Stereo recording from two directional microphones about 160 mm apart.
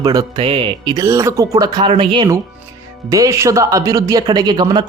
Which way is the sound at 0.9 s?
20° right (ahead or behind).